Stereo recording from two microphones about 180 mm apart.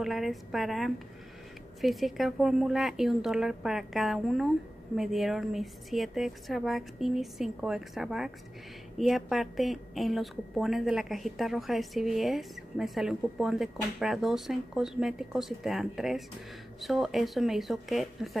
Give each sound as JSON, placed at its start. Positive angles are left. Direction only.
{"t": 0.0, "sound": "a woman's voice", "side_deg": 0}